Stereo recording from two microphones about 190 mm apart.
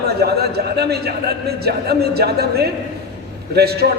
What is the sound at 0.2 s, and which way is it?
A man's voice, 55° right (ahead or behind).